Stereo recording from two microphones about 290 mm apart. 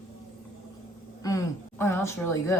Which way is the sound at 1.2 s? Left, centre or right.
Centre.